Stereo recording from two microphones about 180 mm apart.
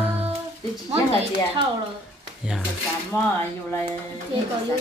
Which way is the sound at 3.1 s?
15° left (ahead or behind).